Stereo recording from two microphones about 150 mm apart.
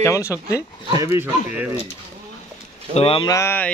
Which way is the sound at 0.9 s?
20° right (ahead or behind).